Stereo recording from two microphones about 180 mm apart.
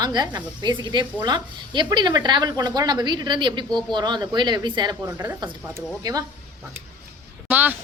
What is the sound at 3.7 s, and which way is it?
Speech, centre (ahead or behind).